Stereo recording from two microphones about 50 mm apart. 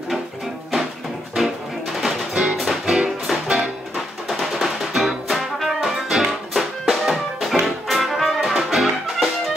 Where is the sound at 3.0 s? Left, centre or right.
Centre.